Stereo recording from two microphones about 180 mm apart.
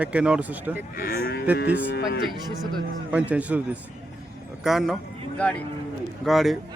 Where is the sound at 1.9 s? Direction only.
60° left (ahead or behind).